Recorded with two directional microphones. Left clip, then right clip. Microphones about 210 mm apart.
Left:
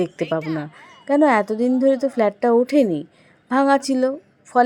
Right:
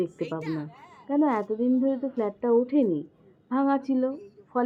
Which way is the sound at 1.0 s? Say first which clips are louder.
Left 9 dB; 35° left (ahead or behind).